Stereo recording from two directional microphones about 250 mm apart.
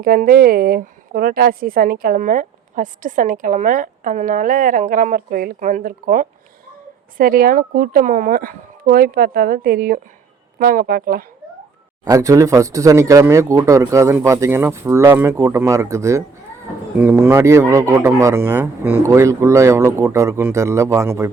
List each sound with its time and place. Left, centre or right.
0.0 s a woman's voice: right
12.0 s speech: centre